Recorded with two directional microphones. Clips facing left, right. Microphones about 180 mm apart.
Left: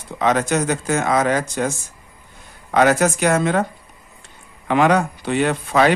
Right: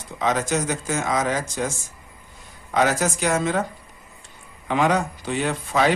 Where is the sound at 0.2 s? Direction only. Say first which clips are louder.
Left 4 dB; 65° left (ahead or behind).